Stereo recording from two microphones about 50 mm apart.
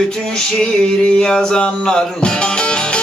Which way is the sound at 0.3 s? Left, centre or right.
Centre.